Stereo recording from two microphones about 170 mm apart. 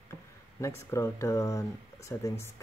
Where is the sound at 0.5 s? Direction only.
15° left (ahead or behind).